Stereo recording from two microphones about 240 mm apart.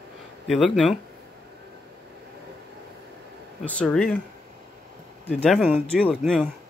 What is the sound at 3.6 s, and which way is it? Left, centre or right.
Mantra, centre.